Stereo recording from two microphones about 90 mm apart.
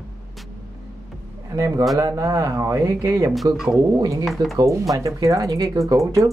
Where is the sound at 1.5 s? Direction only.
35° right (ahead or behind).